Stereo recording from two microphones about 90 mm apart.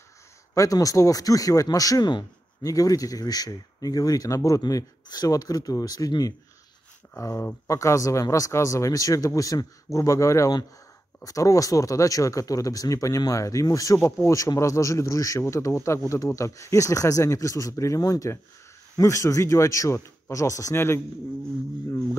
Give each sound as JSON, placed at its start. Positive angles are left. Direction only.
{"t": 0.6, "sound": "speech", "side_deg": 40}
{"t": 7.2, "sound": "speech", "side_deg": 35}